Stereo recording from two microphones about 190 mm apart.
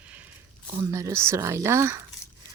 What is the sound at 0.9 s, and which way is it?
Speech, 15° right (ahead or behind).